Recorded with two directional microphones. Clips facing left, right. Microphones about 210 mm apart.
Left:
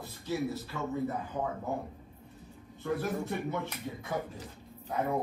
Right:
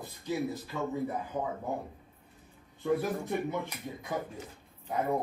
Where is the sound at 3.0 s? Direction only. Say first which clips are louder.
Right 1 dB; 15° right (ahead or behind).